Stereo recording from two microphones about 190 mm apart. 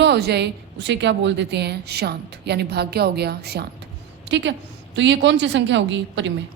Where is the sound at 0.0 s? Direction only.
60° right (ahead or behind).